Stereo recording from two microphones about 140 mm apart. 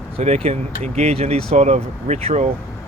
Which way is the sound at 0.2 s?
50° right (ahead or behind).